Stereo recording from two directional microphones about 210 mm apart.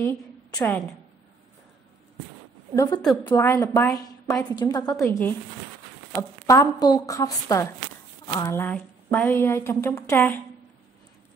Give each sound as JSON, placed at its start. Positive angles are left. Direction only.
{"t": 0.0, "sound": "a woman's voice", "side_deg": 15}
{"t": 2.7, "sound": "a woman's voice", "side_deg": 15}